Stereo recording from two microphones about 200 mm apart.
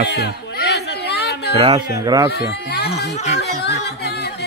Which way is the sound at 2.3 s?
55° left (ahead or behind).